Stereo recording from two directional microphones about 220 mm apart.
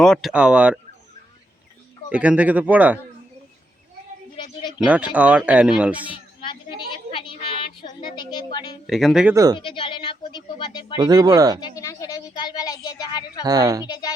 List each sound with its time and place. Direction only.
0.0 s speech: centre (ahead or behind)
2.0 s speech: 5° right (ahead or behind)
4.9 s speech: 5° right (ahead or behind)
6.4 s a sound: 20° left (ahead or behind)
8.0 s speech: 20° left (ahead or behind)
8.9 s speech: centre (ahead or behind)
9.3 s speech: 15° right (ahead or behind)
9.6 s speech: 20° left (ahead or behind)
10.9 s speech: 20° right (ahead or behind)
11.6 s a woman's voice: 15° left (ahead or behind)
13.4 s speech: 15° right (ahead or behind)
13.8 s a woman's voice: 15° left (ahead or behind)